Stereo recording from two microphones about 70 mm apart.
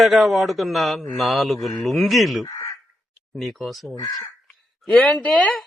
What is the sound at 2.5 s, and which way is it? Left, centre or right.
Crow, left.